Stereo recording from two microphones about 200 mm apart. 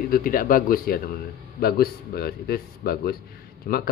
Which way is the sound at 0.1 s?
45° left (ahead or behind).